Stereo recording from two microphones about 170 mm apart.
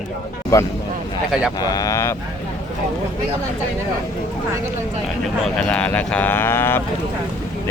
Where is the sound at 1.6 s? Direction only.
20° left (ahead or behind).